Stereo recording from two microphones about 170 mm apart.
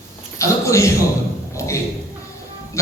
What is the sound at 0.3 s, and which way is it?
Speech, 15° left (ahead or behind).